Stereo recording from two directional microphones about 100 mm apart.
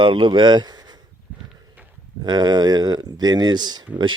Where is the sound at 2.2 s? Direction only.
45° right (ahead or behind).